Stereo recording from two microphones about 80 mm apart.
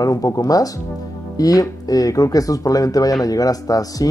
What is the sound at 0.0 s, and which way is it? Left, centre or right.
Speech, left.